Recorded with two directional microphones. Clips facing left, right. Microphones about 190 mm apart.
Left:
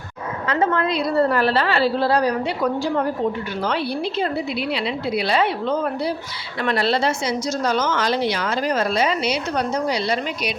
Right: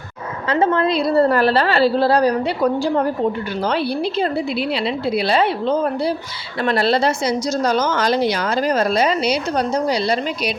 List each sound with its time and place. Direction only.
0.4 s a woman's voice: 30° right (ahead or behind)